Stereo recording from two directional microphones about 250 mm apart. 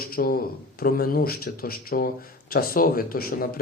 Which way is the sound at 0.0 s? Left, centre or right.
Left.